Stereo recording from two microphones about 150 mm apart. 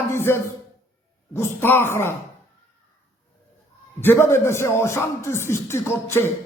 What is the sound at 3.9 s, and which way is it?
Speech, 15° left (ahead or behind).